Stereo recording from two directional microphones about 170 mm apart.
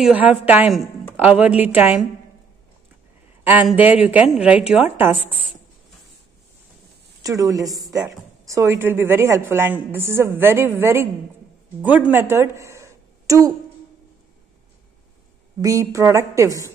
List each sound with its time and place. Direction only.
0.0 s a woman's voice: 5° right (ahead or behind)
3.6 s a woman's voice: 10° right (ahead or behind)
7.2 s a woman's voice: 20° right (ahead or behind)
15.6 s a woman's voice: 20° right (ahead or behind)